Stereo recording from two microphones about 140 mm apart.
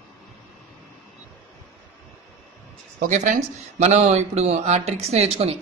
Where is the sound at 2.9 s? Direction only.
60° right (ahead or behind).